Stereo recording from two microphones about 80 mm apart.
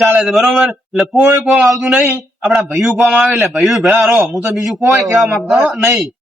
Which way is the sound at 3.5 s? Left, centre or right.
Centre.